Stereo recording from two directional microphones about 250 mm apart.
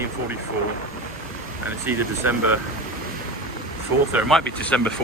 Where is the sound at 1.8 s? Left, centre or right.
Centre.